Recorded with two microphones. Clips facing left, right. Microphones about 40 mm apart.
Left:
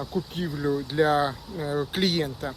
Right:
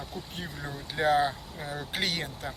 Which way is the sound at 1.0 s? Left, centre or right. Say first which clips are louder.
Left 4 dB; right.